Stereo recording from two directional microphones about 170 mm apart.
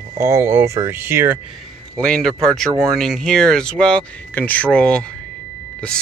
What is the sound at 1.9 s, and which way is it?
Speech, 5° left (ahead or behind).